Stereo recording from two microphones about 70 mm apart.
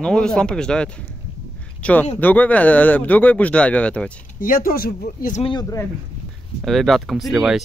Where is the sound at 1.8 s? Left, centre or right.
Left.